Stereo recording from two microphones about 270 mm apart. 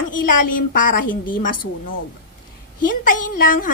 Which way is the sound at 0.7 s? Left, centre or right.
Left.